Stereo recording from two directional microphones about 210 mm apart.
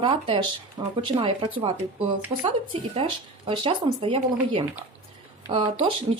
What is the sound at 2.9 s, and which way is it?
A woman's voice, 25° right (ahead or behind).